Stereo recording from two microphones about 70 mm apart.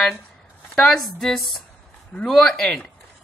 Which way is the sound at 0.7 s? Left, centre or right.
Centre.